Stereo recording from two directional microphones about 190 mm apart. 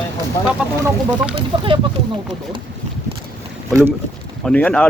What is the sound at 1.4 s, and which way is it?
Speech, 30° right (ahead or behind).